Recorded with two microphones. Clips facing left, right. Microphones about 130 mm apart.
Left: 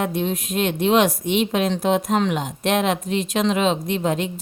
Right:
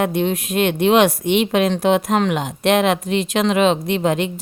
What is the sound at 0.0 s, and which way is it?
Speech, 70° right (ahead or behind).